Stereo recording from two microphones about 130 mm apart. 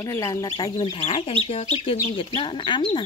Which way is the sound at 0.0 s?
25° left (ahead or behind).